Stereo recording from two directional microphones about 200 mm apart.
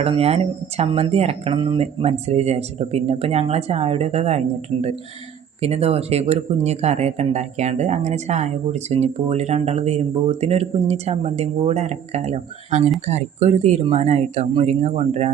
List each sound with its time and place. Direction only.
0.0 s speech: 30° right (ahead or behind)